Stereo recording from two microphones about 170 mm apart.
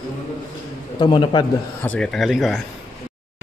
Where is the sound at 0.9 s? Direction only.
25° left (ahead or behind).